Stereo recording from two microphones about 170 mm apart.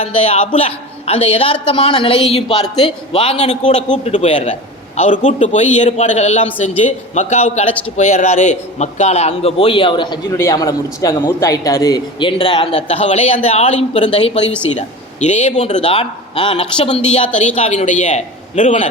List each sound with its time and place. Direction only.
0.3 s a man's voice: 35° left (ahead or behind)
12.7 s a man's voice: 35° left (ahead or behind)